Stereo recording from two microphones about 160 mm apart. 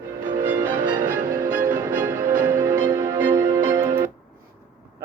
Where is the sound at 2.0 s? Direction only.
15° right (ahead or behind).